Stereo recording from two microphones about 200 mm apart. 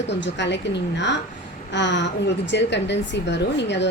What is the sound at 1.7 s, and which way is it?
A woman's voice, 60° left (ahead or behind).